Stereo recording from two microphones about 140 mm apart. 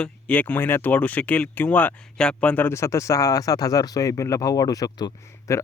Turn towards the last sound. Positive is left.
turn(degrees=25)  # may be behind; listen again after turning